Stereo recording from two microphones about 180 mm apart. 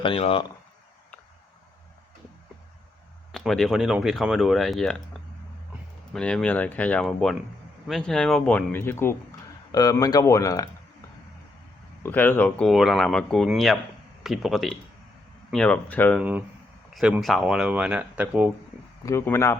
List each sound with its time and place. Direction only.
0.0 s speech: 30° left (ahead or behind)
3.3 s speech: centre (ahead or behind)
6.1 s speech: 5° left (ahead or behind)
12.0 s speech: 10° left (ahead or behind); by 18.5 s 10° right (ahead or behind)
19.0 s speech: 15° left (ahead or behind)